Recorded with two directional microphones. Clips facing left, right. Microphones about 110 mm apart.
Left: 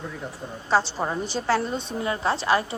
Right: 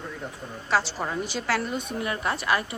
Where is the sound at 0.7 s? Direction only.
25° left (ahead or behind).